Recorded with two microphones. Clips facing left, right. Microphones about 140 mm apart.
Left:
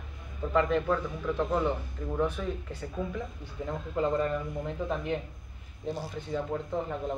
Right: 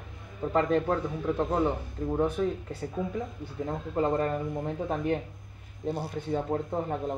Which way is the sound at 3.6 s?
40° right (ahead or behind).